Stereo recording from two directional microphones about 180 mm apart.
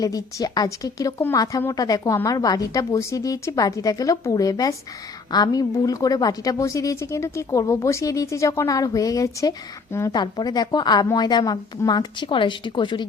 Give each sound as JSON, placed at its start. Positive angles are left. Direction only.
{"t": 0.0, "sound": "a woman's voice", "side_deg": 20}